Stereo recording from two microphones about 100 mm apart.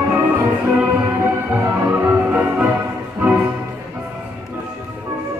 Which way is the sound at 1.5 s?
20° right (ahead or behind).